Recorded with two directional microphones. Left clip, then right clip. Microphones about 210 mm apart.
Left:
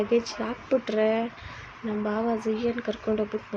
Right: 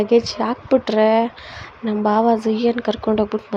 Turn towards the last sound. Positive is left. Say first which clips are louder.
# right 9 dB
turn(degrees=-35)  # may be behind; listen again after turning